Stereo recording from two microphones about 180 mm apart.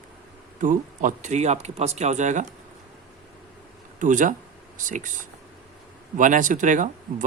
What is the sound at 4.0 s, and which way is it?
Speech, 45° right (ahead or behind).